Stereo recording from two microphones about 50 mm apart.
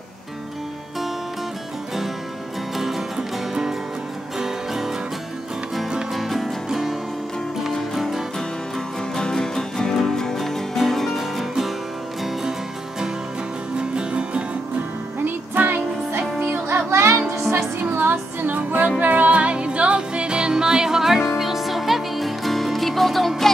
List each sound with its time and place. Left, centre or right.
2.8 s music: centre
6.1 s music: centre
9.1 s music: centre
13.7 s music: centre
15.2 s music: right
16.6 s music: right
17.8 s music: right; by 23.5 s centre